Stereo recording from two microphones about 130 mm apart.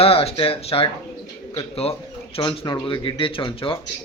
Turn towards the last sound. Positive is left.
turn(degrees=45)  # may be behind; listen again after turning